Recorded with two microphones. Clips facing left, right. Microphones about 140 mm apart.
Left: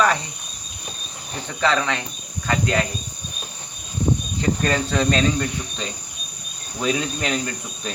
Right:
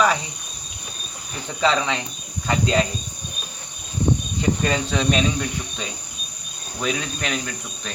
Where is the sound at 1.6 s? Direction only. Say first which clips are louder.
Even; 15° right (ahead or behind).